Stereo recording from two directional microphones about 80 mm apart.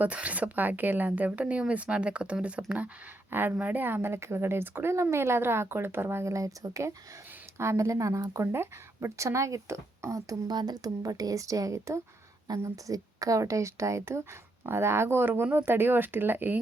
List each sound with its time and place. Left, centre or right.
0.0 s a woman's voice: centre; by 10.3 s right
10.5 s a woman's voice: right